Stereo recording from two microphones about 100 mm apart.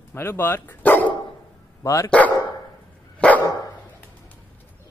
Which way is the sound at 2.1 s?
15° left (ahead or behind).